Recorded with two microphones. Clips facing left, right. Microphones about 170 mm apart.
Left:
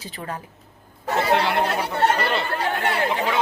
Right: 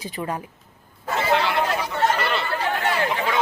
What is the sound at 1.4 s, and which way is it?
Speech, 55° left (ahead or behind).